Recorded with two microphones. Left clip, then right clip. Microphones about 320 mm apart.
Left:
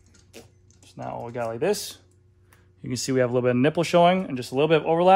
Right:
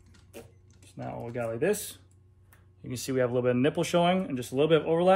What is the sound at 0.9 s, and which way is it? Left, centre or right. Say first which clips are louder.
Speech: left 4 dB; left.